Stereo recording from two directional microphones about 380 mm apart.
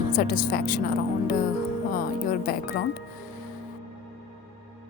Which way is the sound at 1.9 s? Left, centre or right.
Left.